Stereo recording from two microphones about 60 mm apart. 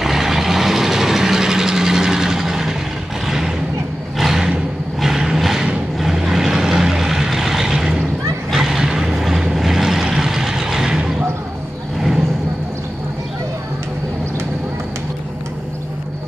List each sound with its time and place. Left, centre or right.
0.0 s vehicle: centre
4.2 s a sound: centre
5.0 s vehicle: centre